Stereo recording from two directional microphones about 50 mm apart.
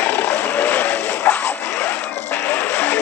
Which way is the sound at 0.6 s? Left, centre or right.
Left.